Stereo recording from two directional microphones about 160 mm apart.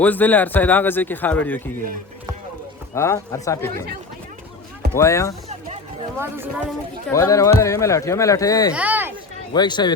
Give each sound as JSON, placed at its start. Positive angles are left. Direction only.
{"t": 0.0, "sound": "a man's voice", "side_deg": 10}
{"t": 2.9, "sound": "speech", "side_deg": 15}
{"t": 4.9, "sound": "speech", "side_deg": 20}
{"t": 6.1, "sound": "speech", "side_deg": -15}
{"t": 7.1, "sound": "speech", "side_deg": 20}
{"t": 8.7, "sound": "speech", "side_deg": -10}
{"t": 9.5, "sound": "speech", "side_deg": 25}